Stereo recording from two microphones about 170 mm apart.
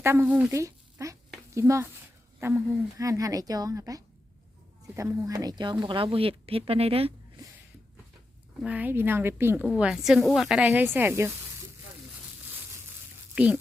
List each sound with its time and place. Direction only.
0.0 s a woman's voice: 15° right (ahead or behind); by 7.1 s 35° right (ahead or behind)
8.6 s a woman's voice: 10° right (ahead or behind)
13.3 s speech: 10° right (ahead or behind)